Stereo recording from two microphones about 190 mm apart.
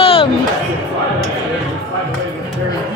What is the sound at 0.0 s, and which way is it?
Crowd, 30° left (ahead or behind).